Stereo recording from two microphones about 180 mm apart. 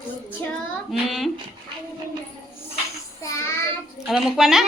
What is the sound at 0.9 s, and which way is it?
Speech, centre (ahead or behind).